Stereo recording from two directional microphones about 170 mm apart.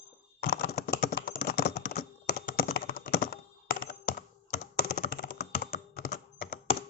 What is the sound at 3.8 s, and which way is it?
Computer keyboard, 50° left (ahead or behind).